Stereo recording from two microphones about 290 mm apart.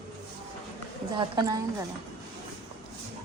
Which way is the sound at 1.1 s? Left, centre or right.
Centre.